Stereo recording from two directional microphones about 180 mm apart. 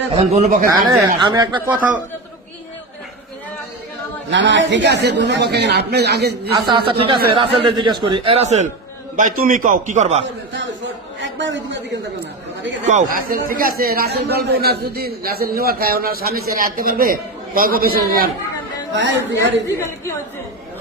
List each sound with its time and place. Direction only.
0.1 s speech: 35° right (ahead or behind)
1.2 s speech: 25° right (ahead or behind)
1.6 s a man's voice: 10° right (ahead or behind)
4.3 s a man's voice: 80° right; by 6.5 s 65° right (ahead or behind)
6.6 s speech: 25° right (ahead or behind)
9.1 s a man's voice: 50° right (ahead or behind)
11.2 s a woman's voice: 90° right
12.8 s a man's voice: 40° right (ahead or behind)
18.9 s a woman's voice: 80° right